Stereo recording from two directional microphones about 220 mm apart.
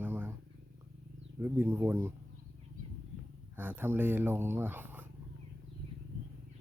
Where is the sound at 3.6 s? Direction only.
10° right (ahead or behind).